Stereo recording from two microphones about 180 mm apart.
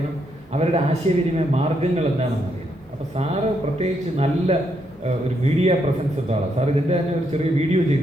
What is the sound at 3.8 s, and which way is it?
A man's voice, 35° right (ahead or behind).